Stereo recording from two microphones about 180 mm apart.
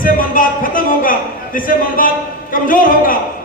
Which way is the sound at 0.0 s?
50° left (ahead or behind).